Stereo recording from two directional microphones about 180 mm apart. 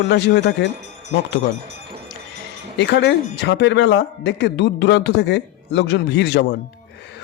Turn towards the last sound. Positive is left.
turn(degrees=70)  # may be behind; listen again after turning